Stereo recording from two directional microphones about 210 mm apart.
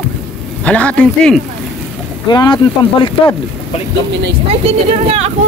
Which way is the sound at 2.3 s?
20° left (ahead or behind).